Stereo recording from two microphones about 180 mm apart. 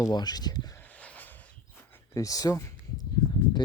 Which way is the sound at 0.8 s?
10° left (ahead or behind).